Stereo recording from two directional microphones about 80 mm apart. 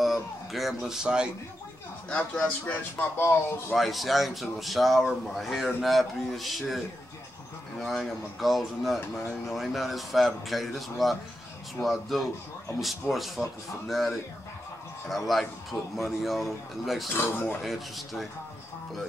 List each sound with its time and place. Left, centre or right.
0.0 s speech: centre
2.0 s speech: centre
2.6 s speech: left
3.7 s speech: centre
7.8 s speech: centre
17.2 s speech: left
17.6 s speech: centre